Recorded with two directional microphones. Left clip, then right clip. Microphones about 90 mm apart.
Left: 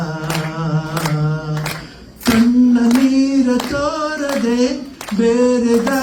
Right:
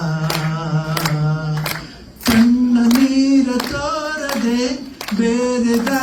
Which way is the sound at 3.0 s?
40° left (ahead or behind).